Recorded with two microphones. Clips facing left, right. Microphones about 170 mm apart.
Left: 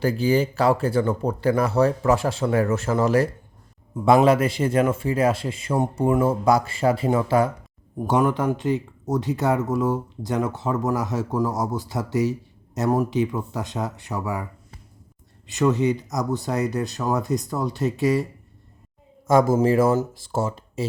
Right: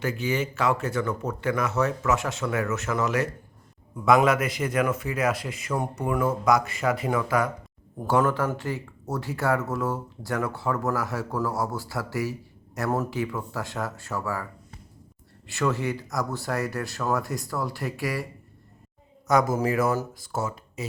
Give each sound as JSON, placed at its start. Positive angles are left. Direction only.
{"t": 0.0, "sound": "speech", "side_deg": 35}
{"t": 7.9, "sound": "speech", "side_deg": 15}
{"t": 15.4, "sound": "speech", "side_deg": 20}
{"t": 19.3, "sound": "speech", "side_deg": 25}